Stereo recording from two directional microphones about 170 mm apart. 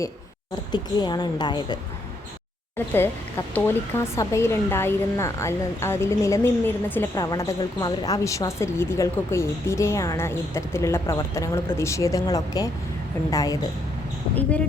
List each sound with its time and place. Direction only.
0.7 s a woman's voice: 25° left (ahead or behind)
2.7 s a woman's voice: 15° left (ahead or behind)